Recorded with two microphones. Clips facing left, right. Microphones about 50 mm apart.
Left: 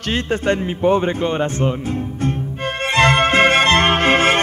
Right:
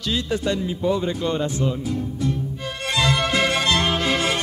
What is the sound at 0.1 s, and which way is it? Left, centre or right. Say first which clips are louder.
A man's voice: left 5 dB; left.